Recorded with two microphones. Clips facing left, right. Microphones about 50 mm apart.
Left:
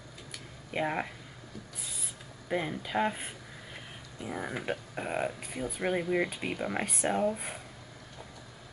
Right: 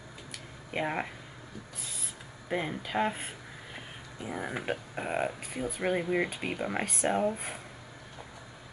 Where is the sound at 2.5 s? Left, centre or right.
Centre.